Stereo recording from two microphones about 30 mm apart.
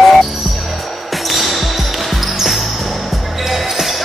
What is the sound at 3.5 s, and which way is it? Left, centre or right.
Music, centre.